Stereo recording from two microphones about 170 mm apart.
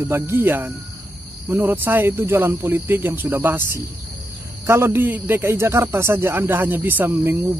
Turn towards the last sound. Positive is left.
turn(degrees=-10)  # may be behind; listen again after turning